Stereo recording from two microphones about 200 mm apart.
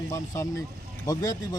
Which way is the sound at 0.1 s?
15° left (ahead or behind).